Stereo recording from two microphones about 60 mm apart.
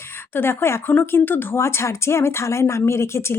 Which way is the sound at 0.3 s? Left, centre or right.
Left.